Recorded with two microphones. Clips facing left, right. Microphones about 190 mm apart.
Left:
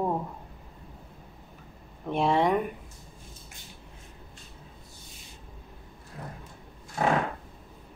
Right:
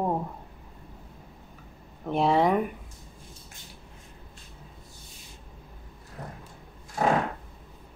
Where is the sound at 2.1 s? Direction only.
Centre (ahead or behind).